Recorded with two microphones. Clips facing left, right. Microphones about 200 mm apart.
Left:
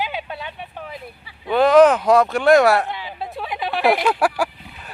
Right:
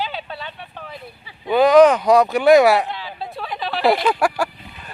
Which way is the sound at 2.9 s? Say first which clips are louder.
Left 1 dB; 15° left (ahead or behind).